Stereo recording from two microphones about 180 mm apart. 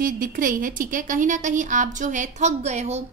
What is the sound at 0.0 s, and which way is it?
A woman's voice, 50° right (ahead or behind).